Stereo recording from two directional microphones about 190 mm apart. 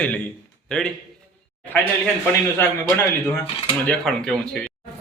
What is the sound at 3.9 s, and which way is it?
Speech, 5° left (ahead or behind).